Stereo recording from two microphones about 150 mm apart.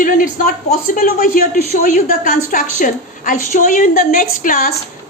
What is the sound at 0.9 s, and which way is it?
A woman's voice, 75° left (ahead or behind).